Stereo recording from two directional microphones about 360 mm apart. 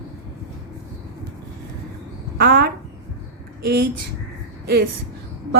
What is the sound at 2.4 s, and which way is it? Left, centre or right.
Speech, right.